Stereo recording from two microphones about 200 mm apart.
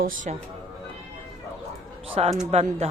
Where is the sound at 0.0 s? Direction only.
45° right (ahead or behind).